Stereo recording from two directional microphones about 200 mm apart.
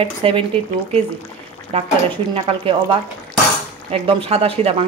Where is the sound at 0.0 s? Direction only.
25° right (ahead or behind).